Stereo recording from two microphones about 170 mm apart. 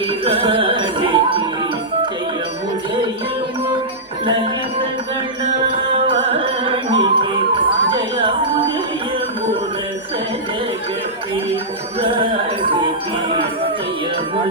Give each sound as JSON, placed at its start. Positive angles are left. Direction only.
{"t": 0.3, "sound": "music", "side_deg": -30}
{"t": 5.6, "sound": "music", "side_deg": -30}
{"t": 11.9, "sound": "a sound", "side_deg": -30}